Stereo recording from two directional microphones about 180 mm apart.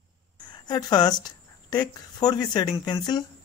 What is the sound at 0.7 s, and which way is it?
Speech, 20° left (ahead or behind).